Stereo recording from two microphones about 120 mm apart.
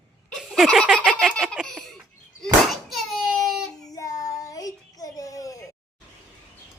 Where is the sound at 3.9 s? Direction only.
30° left (ahead or behind).